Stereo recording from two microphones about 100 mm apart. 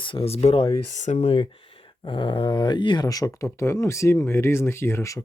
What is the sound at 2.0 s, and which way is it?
Speech, 55° left (ahead or behind).